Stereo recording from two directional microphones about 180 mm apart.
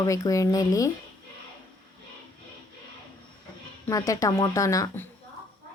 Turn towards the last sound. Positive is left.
turn(degrees=15)  # may be behind; listen again after turning